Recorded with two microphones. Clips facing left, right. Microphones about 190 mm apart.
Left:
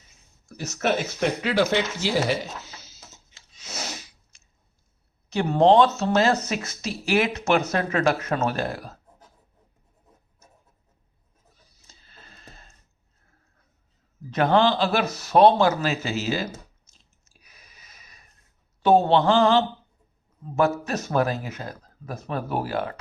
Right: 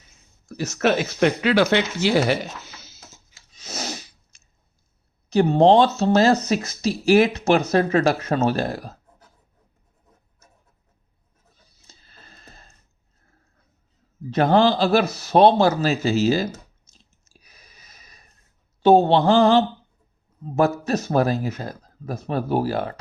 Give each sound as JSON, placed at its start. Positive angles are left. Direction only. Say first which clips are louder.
{"t": 0.4, "sound": "speech", "louder": "right 4 dB", "side_deg": -75}
{"t": 3.6, "sound": "sneeze", "louder": "right 4 dB", "side_deg": -40}
{"t": 5.3, "sound": "speech", "louder": "right 3 dB", "side_deg": -35}
{"t": 11.9, "sound": "a sound", "louder": "right 1 dB", "side_deg": -40}
{"t": 14.3, "sound": "speech", "louder": "right 3 dB", "side_deg": -35}
{"t": 15.2, "sound": "a sound", "louder": "even", "side_deg": -30}
{"t": 18.8, "sound": "speech", "louder": "right 3 dB", "side_deg": -30}